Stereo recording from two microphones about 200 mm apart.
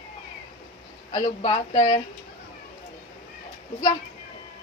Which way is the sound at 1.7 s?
20° left (ahead or behind).